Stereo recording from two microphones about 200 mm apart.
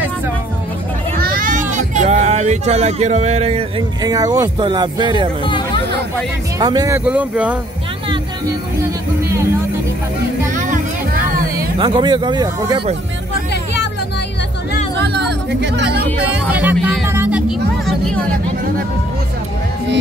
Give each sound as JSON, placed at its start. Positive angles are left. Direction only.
{"t": 1.2, "sound": "a sound", "side_deg": -45}
{"t": 4.0, "sound": "speech", "side_deg": -20}
{"t": 5.4, "sound": "chatter", "side_deg": 25}
{"t": 6.6, "sound": "speech", "side_deg": -20}
{"t": 7.1, "sound": "speech", "side_deg": -5}
{"t": 10.5, "sound": "music", "side_deg": -40}
{"t": 11.8, "sound": "speech", "side_deg": -25}
{"t": 15.0, "sound": "music", "side_deg": -60}
{"t": 16.7, "sound": "music", "side_deg": 0}
{"t": 17.1, "sound": "music", "side_deg": -10}